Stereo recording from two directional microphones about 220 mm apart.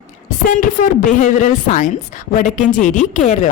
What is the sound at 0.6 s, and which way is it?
Speech, 35° left (ahead or behind).